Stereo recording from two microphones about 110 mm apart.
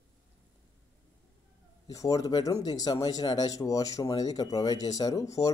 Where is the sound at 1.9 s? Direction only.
30° left (ahead or behind).